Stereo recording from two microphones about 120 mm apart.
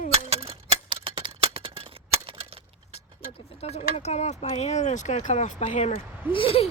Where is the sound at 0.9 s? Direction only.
45° right (ahead or behind).